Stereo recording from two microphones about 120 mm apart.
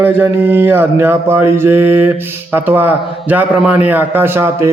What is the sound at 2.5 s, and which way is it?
A man's voice, 15° right (ahead or behind).